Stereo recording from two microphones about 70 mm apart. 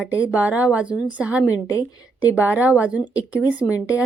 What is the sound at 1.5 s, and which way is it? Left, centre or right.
Speech, left.